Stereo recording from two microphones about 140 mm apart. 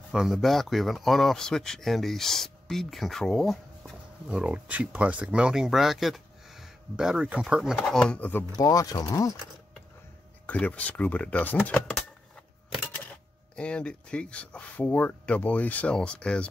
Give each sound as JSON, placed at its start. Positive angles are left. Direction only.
{"t": 0.1, "sound": "speech", "side_deg": 0}
{"t": 7.8, "sound": "speech", "side_deg": 5}
{"t": 8.5, "sound": "speech", "side_deg": 25}
{"t": 10.4, "sound": "speech", "side_deg": 10}
{"t": 13.6, "sound": "speech", "side_deg": 10}